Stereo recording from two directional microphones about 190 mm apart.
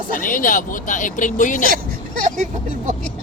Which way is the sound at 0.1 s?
45° left (ahead or behind).